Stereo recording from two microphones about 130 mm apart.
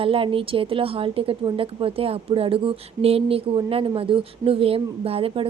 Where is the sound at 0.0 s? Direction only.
45° right (ahead or behind).